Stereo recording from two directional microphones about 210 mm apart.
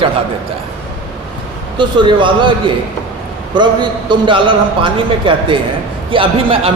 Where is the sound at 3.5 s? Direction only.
20° right (ahead or behind).